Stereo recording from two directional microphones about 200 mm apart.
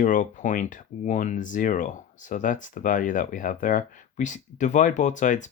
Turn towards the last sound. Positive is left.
turn(degrees=40)  # may be behind; listen again after turning